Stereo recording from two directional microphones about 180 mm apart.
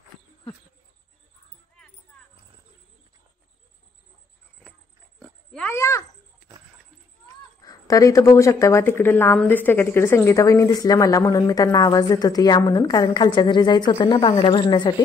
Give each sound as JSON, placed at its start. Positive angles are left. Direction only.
{"t": 5.2, "sound": "pig", "side_deg": 5}
{"t": 7.6, "sound": "speech", "side_deg": 20}